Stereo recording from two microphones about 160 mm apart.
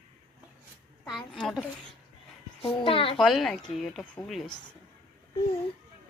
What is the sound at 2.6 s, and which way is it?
Speech, 35° left (ahead or behind).